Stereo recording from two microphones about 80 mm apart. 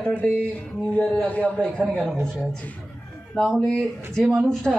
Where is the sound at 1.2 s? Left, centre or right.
Centre.